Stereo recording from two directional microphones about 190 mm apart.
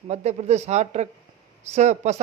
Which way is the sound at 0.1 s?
35° right (ahead or behind).